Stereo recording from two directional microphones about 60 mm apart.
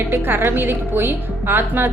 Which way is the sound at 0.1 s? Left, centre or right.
Right.